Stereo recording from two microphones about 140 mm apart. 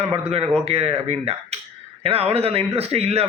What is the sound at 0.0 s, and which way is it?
A man's voice, 45° right (ahead or behind).